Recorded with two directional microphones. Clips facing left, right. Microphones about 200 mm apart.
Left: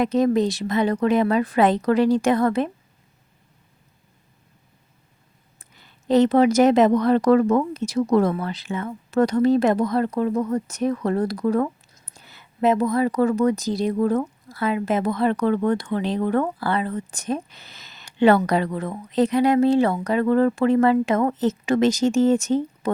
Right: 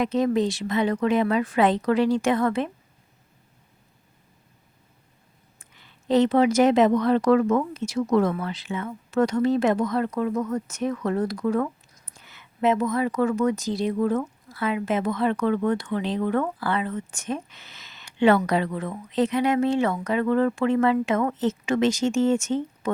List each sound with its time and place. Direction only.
0.0 s speech: 40° left (ahead or behind)
5.5 s speech: 40° left (ahead or behind)